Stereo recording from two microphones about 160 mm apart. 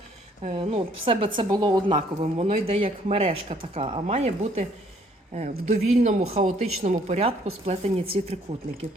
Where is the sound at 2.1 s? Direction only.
40° right (ahead or behind).